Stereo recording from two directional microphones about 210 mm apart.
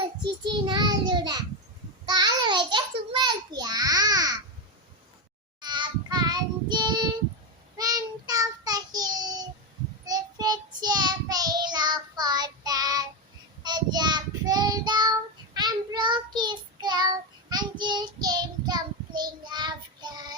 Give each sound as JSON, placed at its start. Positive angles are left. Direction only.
{"t": 0.0, "sound": "child singing", "side_deg": -20}
{"t": 2.0, "sound": "a sound", "side_deg": -20}
{"t": 5.5, "sound": "child singing", "side_deg": -20}